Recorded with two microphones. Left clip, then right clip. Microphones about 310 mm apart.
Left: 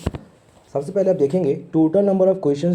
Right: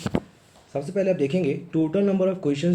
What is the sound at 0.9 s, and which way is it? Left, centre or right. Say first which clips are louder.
Speech: left 5 dB; centre.